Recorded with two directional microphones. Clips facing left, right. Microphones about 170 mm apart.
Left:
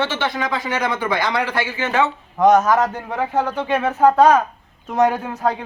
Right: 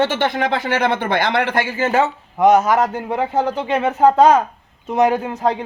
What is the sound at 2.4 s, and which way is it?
Speech, 10° right (ahead or behind).